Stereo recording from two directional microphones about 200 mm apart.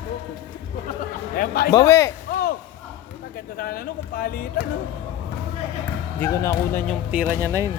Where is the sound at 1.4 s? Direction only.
50° left (ahead or behind).